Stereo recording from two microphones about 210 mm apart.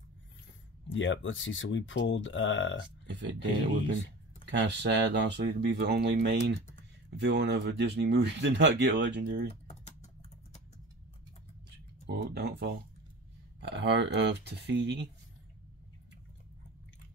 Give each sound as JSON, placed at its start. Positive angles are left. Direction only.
{"t": 0.9, "sound": "speech", "side_deg": 60}
{"t": 3.1, "sound": "speech", "side_deg": -60}
{"t": 4.5, "sound": "speech", "side_deg": -55}
{"t": 12.1, "sound": "speech", "side_deg": -50}